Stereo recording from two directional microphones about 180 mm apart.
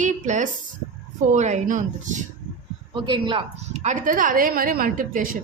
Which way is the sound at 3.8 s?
50° right (ahead or behind).